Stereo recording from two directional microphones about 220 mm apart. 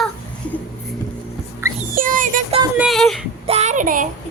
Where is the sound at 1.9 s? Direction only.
40° right (ahead or behind).